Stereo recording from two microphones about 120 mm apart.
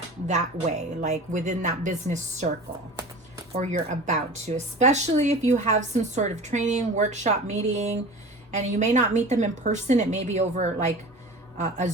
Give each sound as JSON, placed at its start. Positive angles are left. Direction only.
{"t": 0.3, "sound": "a woman's voice", "side_deg": -75}
{"t": 3.5, "sound": "speech", "side_deg": -75}
{"t": 11.5, "sound": "a man's voice", "side_deg": -90}